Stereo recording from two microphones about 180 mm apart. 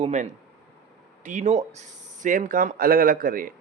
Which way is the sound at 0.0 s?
40° right (ahead or behind).